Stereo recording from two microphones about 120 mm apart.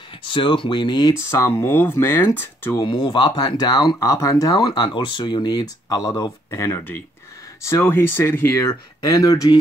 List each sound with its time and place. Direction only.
0.3 s speech: 45° left (ahead or behind)
1.3 s speech: 20° left (ahead or behind)
2.8 s speech: 40° left (ahead or behind)